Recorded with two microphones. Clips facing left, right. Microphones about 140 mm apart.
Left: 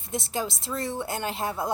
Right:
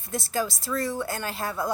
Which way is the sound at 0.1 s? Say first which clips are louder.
Right 2 dB; 25° left (ahead or behind).